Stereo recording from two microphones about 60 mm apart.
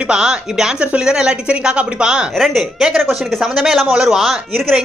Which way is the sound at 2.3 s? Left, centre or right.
Centre.